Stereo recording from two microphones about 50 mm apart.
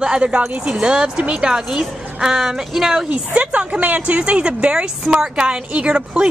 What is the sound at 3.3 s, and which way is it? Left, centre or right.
A woman's voice, right.